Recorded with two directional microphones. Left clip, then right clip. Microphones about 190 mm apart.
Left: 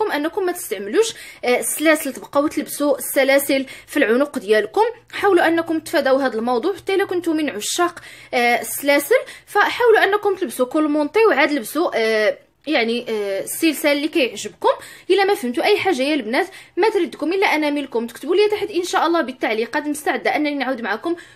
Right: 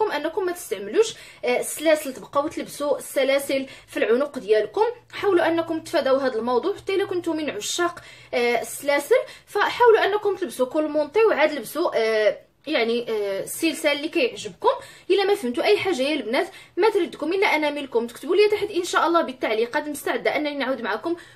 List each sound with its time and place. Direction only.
0.0 s a woman's voice: 35° left (ahead or behind)